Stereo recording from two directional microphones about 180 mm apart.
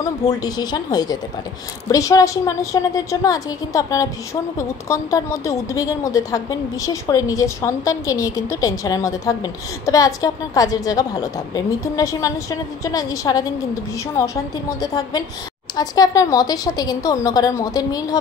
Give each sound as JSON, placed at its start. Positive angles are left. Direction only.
{"t": 0.0, "sound": "a woman's voice", "side_deg": 20}